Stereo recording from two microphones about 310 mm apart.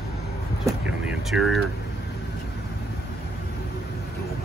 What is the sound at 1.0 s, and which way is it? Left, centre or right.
Speech, centre.